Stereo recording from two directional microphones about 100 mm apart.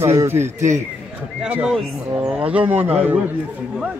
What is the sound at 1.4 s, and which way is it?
Speech, 10° right (ahead or behind).